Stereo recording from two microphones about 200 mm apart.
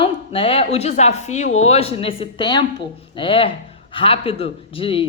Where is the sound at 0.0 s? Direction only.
30° left (ahead or behind).